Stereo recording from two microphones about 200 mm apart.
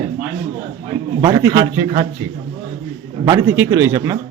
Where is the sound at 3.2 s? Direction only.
15° right (ahead or behind).